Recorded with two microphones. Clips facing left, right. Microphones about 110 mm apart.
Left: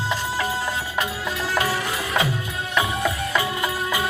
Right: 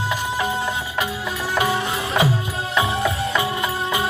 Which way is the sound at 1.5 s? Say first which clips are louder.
Right 4 dB; 20° right (ahead or behind).